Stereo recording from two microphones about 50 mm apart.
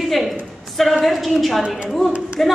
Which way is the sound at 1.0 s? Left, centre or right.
Centre.